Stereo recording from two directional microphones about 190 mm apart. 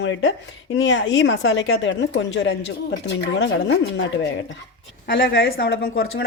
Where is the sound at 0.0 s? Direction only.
90° left.